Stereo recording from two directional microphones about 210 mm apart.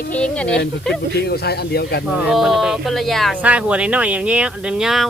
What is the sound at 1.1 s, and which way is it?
Speech, 50° left (ahead or behind).